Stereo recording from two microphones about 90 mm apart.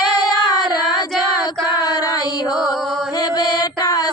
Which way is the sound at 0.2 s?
50° left (ahead or behind).